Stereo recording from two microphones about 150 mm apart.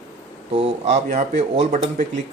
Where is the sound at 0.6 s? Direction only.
50° right (ahead or behind).